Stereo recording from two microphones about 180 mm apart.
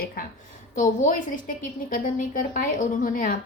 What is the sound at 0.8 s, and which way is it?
A woman's voice, 50° left (ahead or behind).